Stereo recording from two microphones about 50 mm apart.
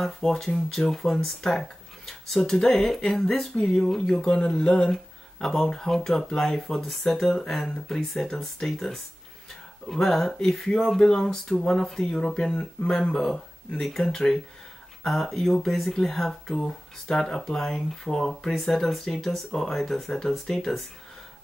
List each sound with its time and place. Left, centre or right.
0.0 s speech: centre